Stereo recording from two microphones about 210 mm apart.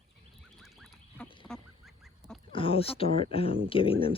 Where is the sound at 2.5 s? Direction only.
25° left (ahead or behind).